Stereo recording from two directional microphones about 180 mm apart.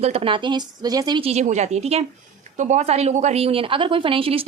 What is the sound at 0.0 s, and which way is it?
A woman's voice, 35° right (ahead or behind).